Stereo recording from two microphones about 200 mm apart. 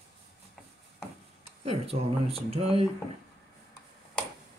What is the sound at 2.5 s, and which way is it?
Speech, 30° right (ahead or behind).